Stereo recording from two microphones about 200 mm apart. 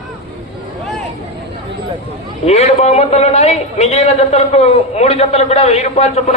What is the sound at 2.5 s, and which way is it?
A man's voice, 35° left (ahead or behind).